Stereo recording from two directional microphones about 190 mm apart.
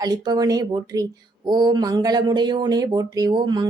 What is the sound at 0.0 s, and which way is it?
Speech, 20° right (ahead or behind).